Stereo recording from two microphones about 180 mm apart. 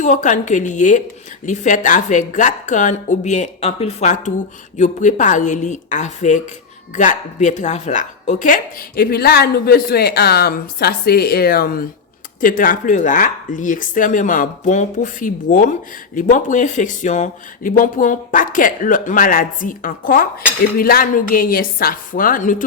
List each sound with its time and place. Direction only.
0.0 s speech: 45° left (ahead or behind)